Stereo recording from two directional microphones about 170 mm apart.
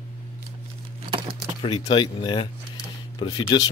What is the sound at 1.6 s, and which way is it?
Speech, 30° left (ahead or behind).